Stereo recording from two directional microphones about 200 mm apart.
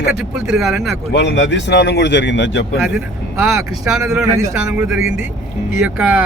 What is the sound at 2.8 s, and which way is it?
Speech, 5° right (ahead or behind).